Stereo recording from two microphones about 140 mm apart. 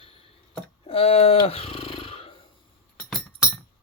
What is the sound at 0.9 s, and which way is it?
Speech, 45° left (ahead or behind).